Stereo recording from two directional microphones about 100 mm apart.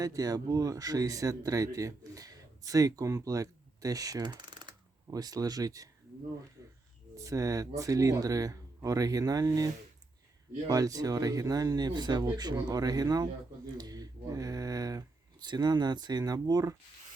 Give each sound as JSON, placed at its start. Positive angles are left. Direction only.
{"t": 0.0, "sound": "speech", "side_deg": -35}
{"t": 7.2, "sound": "speech", "side_deg": -35}